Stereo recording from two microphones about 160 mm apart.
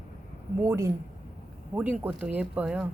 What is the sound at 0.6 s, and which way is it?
Speech, 15° right (ahead or behind).